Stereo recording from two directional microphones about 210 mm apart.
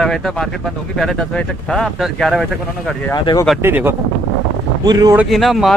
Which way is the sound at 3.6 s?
10° right (ahead or behind).